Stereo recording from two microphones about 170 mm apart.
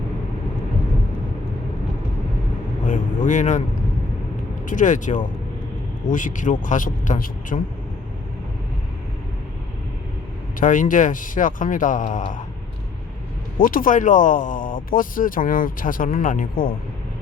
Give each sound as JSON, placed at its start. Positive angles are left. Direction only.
{"t": 2.8, "sound": "a man's voice", "side_deg": 45}
{"t": 4.6, "sound": "speech", "side_deg": 50}
{"t": 10.6, "sound": "speech", "side_deg": 50}
{"t": 13.6, "sound": "speech", "side_deg": 55}